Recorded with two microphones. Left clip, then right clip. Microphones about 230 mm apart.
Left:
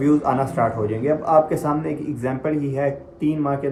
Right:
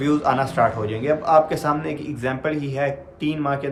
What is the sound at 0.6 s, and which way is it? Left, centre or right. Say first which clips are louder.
Speech: right 1 dB; centre.